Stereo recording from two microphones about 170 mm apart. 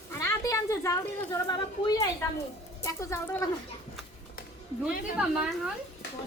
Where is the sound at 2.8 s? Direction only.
15° left (ahead or behind).